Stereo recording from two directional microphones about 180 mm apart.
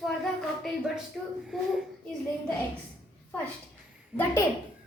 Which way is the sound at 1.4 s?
Centre (ahead or behind).